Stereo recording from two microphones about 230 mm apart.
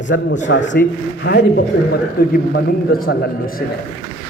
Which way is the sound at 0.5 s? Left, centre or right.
Left.